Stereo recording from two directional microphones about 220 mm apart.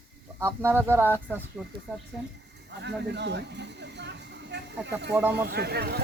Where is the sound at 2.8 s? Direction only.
50° right (ahead or behind).